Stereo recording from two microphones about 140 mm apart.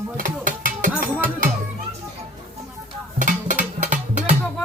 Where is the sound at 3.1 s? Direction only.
65° right (ahead or behind).